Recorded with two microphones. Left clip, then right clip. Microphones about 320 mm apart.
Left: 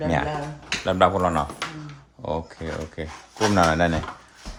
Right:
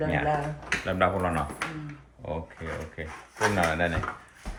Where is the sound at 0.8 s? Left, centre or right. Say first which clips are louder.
Left 7 dB; centre.